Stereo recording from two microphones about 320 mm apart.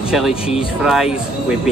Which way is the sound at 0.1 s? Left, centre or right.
Centre.